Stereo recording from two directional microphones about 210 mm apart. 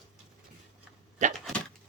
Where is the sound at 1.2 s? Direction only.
35° right (ahead or behind).